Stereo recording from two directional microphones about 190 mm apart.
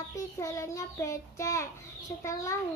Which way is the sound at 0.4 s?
15° left (ahead or behind).